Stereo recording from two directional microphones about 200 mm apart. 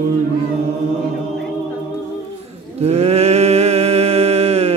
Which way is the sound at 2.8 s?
30° right (ahead or behind).